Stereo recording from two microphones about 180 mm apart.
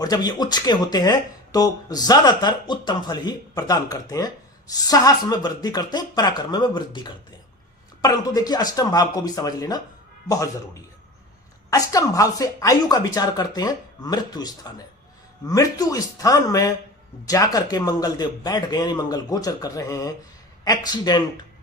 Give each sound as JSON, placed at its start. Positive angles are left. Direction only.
{"t": 0.0, "sound": "speech", "side_deg": 20}